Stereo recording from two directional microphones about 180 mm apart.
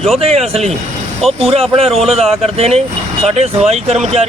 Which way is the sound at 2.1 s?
35° right (ahead or behind).